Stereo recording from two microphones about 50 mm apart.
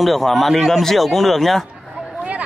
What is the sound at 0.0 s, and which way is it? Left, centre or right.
Speech, centre.